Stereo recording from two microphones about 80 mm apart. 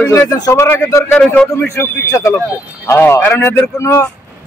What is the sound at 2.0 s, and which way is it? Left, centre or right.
A man's voice, left.